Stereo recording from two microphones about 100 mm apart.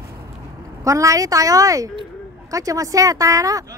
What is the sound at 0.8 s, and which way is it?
Speech, 35° right (ahead or behind).